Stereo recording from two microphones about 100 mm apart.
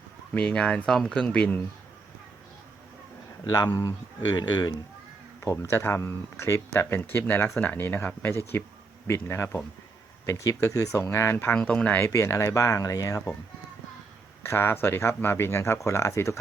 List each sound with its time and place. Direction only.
0.3 s speech: 15° left (ahead or behind)
3.5 s speech: 40° left (ahead or behind)
5.4 s speech: 30° left (ahead or behind)
11.9 s speech: 30° left (ahead or behind)
14.4 s speech: 25° left (ahead or behind)